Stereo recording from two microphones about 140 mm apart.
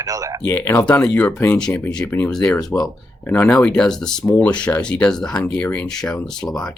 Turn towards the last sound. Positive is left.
turn(degrees=5)  # may be behind; listen again after turning